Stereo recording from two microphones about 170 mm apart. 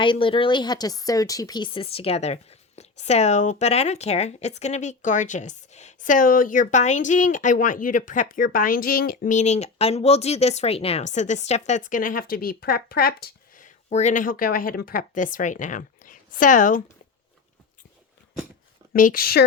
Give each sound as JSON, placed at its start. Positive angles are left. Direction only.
{"t": 0.0, "sound": "speech", "side_deg": 30}
{"t": 18.9, "sound": "a woman's voice", "side_deg": 55}